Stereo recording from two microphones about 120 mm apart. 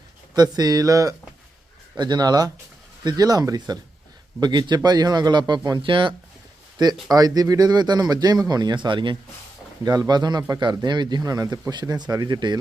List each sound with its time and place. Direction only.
0.3 s a man's voice: 35° right (ahead or behind)
7.1 s a man's voice: 30° right (ahead or behind)